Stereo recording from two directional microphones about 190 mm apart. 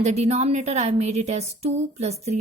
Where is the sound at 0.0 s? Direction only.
35° right (ahead or behind).